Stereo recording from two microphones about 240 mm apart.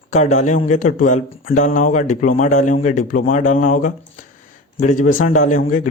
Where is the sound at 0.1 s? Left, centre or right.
Left.